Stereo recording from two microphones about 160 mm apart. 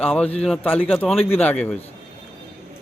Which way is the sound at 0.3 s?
5° left (ahead or behind).